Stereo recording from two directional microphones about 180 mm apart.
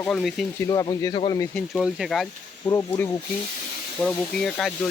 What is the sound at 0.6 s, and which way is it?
Speech, 20° left (ahead or behind).